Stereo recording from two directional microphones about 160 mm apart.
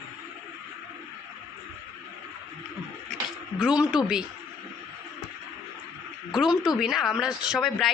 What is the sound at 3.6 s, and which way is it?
Speech, 5° right (ahead or behind).